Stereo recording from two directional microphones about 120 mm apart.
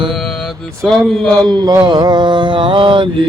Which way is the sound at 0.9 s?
5° left (ahead or behind).